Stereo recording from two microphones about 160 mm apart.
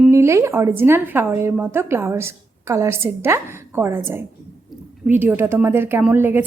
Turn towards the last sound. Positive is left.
turn(degrees=-15)  # may be behind; listen again after turning